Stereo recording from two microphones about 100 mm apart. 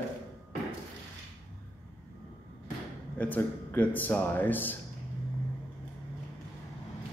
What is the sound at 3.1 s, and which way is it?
A man's voice, 15° left (ahead or behind).